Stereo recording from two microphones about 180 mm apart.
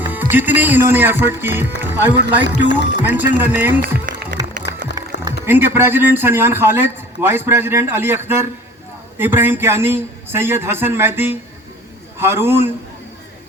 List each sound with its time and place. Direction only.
0.0 s a man's voice: 10° right (ahead or behind)
4.0 s music: 50° right (ahead or behind)
4.7 s music: 20° right (ahead or behind)
5.1 s music: 70° left (ahead or behind)
5.5 s a man's voice: 10° right (ahead or behind)